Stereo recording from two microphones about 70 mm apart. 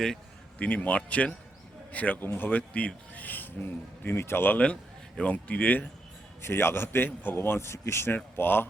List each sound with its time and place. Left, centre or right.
0.6 s a man's voice: left
4.5 s speech: centre
6.4 s a man's voice: left